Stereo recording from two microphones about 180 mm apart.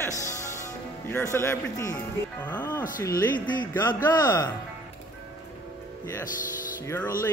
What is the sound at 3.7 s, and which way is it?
Speech, 10° left (ahead or behind).